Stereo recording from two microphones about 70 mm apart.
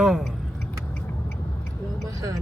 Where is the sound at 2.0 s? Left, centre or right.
Right.